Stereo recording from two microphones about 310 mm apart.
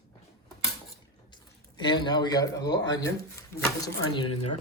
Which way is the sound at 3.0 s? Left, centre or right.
Centre.